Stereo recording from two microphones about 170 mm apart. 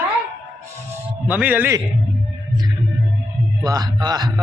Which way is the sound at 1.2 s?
10° right (ahead or behind).